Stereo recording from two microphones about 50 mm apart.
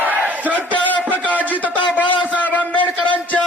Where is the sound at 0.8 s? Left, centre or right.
Left.